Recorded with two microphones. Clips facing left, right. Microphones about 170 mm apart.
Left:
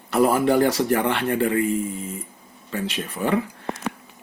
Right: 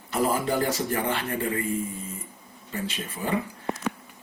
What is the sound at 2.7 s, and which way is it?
Speech, 70° left (ahead or behind).